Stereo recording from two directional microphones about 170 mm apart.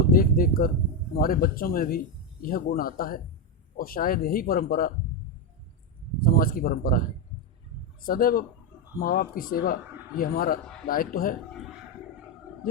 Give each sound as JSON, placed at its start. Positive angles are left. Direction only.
{"t": 0.1, "sound": "speech", "side_deg": 60}
{"t": 6.2, "sound": "speech", "side_deg": 60}
{"t": 8.0, "sound": "speech", "side_deg": 55}